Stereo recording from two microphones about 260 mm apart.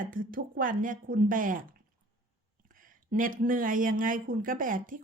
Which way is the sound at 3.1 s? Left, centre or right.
Right.